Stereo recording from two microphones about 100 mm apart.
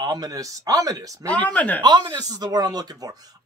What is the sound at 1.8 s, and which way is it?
Speech, 45° right (ahead or behind).